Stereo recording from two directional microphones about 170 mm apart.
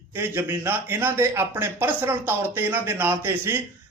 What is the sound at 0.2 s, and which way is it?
A man's voice, 10° right (ahead or behind).